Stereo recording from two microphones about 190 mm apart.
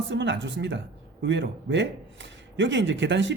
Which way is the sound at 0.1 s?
70° right (ahead or behind).